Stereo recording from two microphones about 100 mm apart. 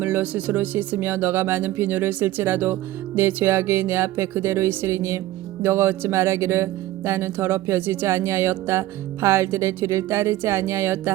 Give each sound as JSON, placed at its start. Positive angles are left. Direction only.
{"t": 0.0, "sound": "speech", "side_deg": -15}